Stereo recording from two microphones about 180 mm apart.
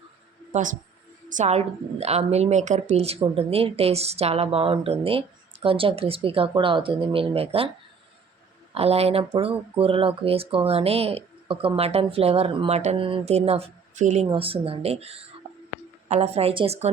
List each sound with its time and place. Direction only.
0.5 s a woman's voice: 45° right (ahead or behind)
8.7 s speech: 35° right (ahead or behind)